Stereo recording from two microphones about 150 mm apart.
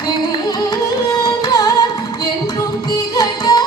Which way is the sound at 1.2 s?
25° left (ahead or behind).